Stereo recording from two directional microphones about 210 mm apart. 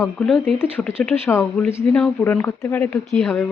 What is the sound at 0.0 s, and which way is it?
Speech, 5° left (ahead or behind).